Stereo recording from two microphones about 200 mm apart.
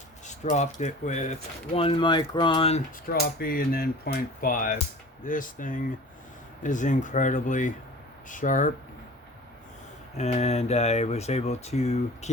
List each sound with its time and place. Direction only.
0.3 s speech: 35° left (ahead or behind)
3.1 s speech: 50° left (ahead or behind)
10.2 s speech: 30° left (ahead or behind)